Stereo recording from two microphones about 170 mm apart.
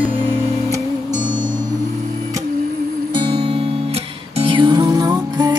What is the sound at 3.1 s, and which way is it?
Music, 30° right (ahead or behind).